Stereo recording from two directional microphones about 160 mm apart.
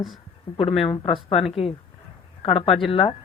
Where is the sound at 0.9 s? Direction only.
35° left (ahead or behind).